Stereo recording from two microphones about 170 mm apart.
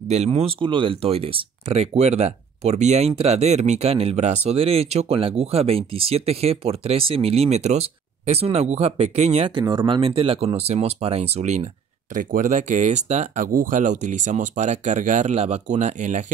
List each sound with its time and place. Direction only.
0.1 s speech: 40° right (ahead or behind)